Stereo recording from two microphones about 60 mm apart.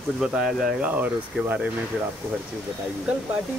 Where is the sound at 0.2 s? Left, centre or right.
Centre.